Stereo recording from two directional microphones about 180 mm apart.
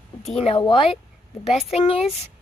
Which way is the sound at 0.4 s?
30° left (ahead or behind).